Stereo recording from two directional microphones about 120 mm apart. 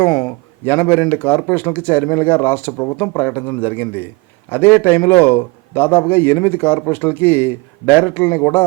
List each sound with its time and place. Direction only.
0.0 s a man's voice: 10° left (ahead or behind)